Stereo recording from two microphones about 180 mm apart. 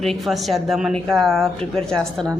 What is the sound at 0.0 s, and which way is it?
Speech, centre (ahead or behind).